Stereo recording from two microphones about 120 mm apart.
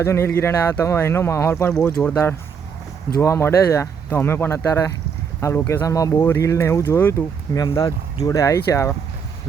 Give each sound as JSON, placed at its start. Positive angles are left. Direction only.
{"t": 0.0, "sound": "speech", "side_deg": 20}
{"t": 1.7, "sound": "speech", "side_deg": 5}
{"t": 3.2, "sound": "speech", "side_deg": 25}